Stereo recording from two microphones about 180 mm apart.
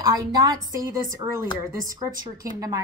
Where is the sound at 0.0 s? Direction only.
20° right (ahead or behind).